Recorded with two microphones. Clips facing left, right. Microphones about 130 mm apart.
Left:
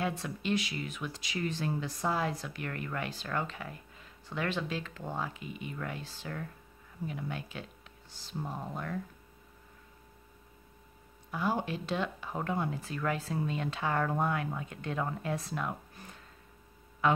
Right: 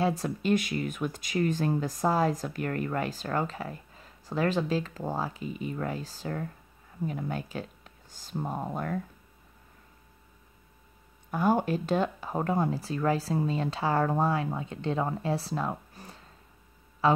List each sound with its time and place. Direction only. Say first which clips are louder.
0.0 s speech: right 6 dB; 40° right (ahead or behind)
11.2 s speech: right 7 dB; 50° right (ahead or behind); by 17.2 s 30° right (ahead or behind)